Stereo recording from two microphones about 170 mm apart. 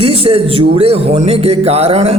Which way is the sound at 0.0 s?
35° right (ahead or behind).